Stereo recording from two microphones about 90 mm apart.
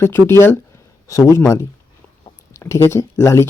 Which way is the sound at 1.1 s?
40° left (ahead or behind).